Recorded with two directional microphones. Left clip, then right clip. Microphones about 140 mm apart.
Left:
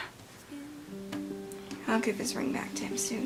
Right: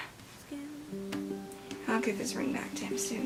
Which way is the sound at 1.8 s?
35° left (ahead or behind).